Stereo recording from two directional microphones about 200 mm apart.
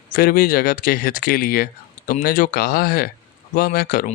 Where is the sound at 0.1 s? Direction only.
45° left (ahead or behind).